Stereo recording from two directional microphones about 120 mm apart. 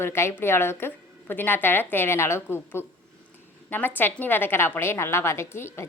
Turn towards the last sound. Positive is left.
turn(degrees=20)  # may be behind; listen again after turning